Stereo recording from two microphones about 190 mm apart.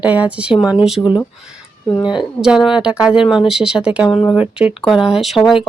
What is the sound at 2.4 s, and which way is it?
Speech, 5° right (ahead or behind).